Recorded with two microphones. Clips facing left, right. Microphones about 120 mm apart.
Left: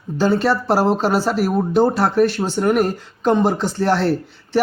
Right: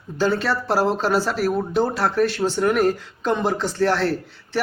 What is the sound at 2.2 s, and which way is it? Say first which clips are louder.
Speech: left 2 dB; 15° left (ahead or behind).